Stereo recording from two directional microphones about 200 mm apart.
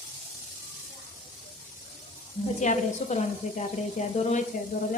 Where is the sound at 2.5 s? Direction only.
35° left (ahead or behind).